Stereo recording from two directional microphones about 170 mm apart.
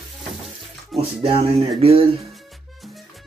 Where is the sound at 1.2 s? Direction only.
35° right (ahead or behind).